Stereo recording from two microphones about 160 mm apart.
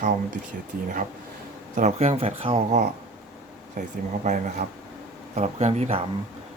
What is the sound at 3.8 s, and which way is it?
Speech, 55° right (ahead or behind).